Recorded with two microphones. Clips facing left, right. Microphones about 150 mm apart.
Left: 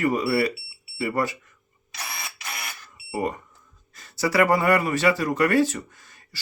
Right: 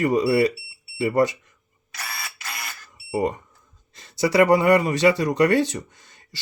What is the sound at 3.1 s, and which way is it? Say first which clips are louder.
Speech: right 4 dB; 20° right (ahead or behind).